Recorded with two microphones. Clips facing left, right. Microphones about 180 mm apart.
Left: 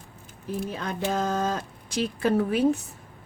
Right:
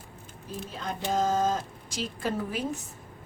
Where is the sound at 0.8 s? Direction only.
65° left (ahead or behind).